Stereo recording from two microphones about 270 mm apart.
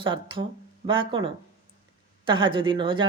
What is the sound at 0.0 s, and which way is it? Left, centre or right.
Speech, centre.